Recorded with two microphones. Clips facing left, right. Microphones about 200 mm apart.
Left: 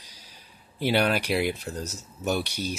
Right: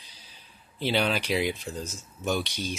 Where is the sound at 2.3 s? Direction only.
10° left (ahead or behind).